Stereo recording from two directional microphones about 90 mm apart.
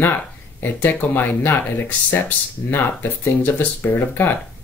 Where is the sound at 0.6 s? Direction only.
20° left (ahead or behind).